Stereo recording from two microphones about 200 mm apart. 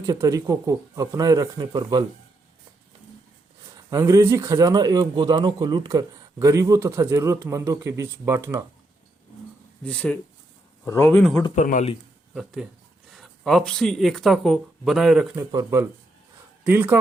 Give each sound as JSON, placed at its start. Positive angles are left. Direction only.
{"t": 0.0, "sound": "speech", "side_deg": -15}
{"t": 3.8, "sound": "speech", "side_deg": -15}
{"t": 9.8, "sound": "speech", "side_deg": 5}
{"t": 11.5, "sound": "a man's voice", "side_deg": 40}
{"t": 12.3, "sound": "speech", "side_deg": 0}
{"t": 15.4, "sound": "speech", "side_deg": -15}